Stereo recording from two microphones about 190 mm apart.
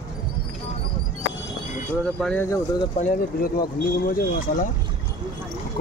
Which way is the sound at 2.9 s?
40° left (ahead or behind).